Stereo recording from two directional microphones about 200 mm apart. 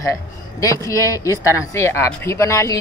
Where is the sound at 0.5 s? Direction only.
15° left (ahead or behind).